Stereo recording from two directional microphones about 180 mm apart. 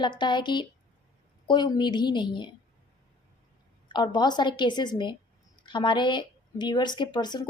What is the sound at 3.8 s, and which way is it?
Speech, 25° left (ahead or behind).